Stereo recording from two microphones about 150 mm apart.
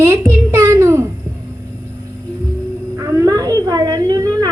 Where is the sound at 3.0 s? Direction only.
25° right (ahead or behind).